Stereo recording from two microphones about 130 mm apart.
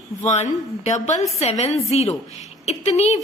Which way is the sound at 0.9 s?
60° left (ahead or behind).